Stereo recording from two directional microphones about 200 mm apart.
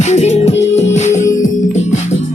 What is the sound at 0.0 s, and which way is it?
Music, 35° left (ahead or behind).